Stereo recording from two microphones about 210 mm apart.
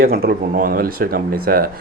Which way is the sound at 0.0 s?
45° right (ahead or behind).